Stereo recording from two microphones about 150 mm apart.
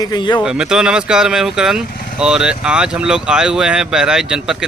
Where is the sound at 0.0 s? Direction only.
30° left (ahead or behind).